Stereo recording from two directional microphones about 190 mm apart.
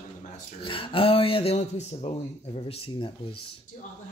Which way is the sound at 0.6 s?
30° left (ahead or behind).